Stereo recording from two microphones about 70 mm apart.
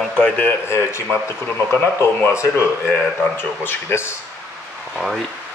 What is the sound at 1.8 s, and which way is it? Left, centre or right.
Speech, left.